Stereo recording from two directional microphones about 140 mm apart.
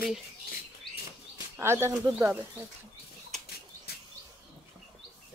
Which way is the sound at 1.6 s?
20° right (ahead or behind).